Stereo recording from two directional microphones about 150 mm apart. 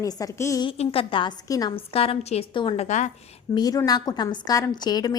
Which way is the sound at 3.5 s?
25° left (ahead or behind).